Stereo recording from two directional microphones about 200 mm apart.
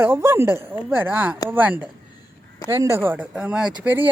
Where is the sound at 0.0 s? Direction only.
10° right (ahead or behind).